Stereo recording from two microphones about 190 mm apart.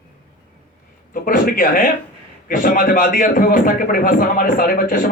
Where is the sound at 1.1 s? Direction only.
45° left (ahead or behind).